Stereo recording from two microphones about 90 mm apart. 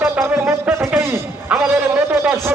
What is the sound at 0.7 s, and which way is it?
Speech, 10° right (ahead or behind).